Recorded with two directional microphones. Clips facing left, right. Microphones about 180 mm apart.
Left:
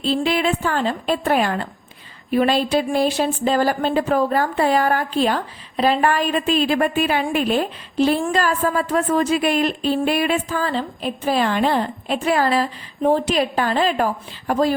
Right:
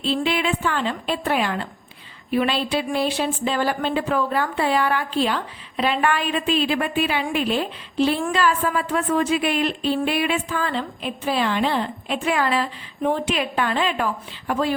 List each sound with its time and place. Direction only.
0.0 s speech: 40° left (ahead or behind)